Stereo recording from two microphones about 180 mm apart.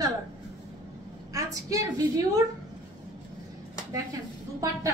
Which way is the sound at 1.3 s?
20° right (ahead or behind).